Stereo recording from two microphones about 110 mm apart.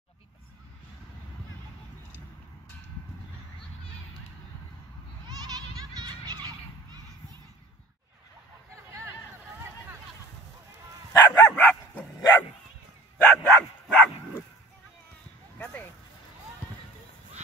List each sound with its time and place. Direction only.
5.5 s goat: 35° right (ahead or behind)
11.2 s dog: 20° left (ahead or behind)
15.6 s a sound: 15° left (ahead or behind)